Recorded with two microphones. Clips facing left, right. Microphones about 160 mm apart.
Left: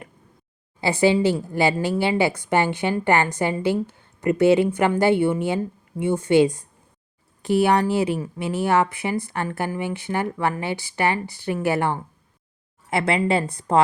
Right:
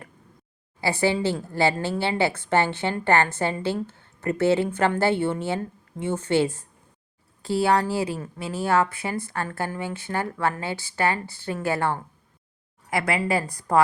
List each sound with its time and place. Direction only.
0.8 s a woman's voice: 20° left (ahead or behind)